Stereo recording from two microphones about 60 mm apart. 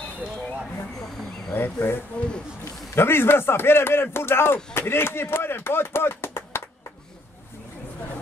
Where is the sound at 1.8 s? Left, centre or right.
Left.